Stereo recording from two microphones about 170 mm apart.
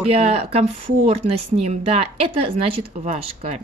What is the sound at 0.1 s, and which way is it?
Speech, 35° right (ahead or behind).